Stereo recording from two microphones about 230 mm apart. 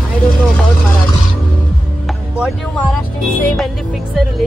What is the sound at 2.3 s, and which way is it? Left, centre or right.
Speech, centre.